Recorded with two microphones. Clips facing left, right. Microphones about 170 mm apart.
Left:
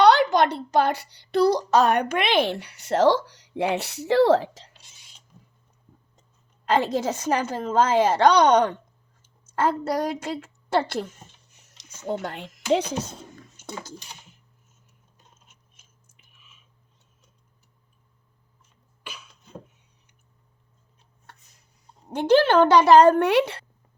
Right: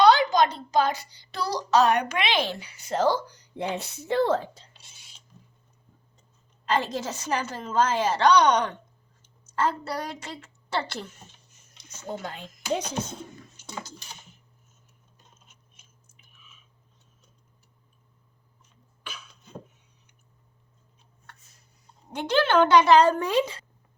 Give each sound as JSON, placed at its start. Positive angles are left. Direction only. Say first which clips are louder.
{"t": 0.0, "sound": "a child's voice", "louder": "left 2 dB", "side_deg": 65}
{"t": 6.7, "sound": "a woman's voice", "louder": "left 6 dB", "side_deg": 55}
{"t": 11.5, "sound": "a sound", "louder": "even", "side_deg": 70}
{"t": 12.0, "sound": "a child's voice", "louder": "left 5 dB", "side_deg": 65}
{"t": 13.6, "sound": "a sound", "louder": "left 3 dB", "side_deg": 50}
{"t": 22.1, "sound": "speech", "louder": "left 5 dB", "side_deg": 40}